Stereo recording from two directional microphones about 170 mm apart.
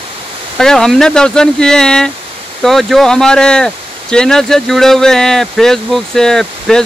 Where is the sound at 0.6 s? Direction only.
5° left (ahead or behind).